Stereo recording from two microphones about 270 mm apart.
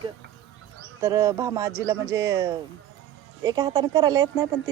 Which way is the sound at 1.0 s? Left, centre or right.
Centre.